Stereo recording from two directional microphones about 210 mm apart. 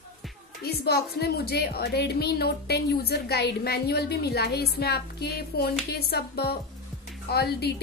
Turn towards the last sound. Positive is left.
turn(degrees=50)  # may be behind; listen again after turning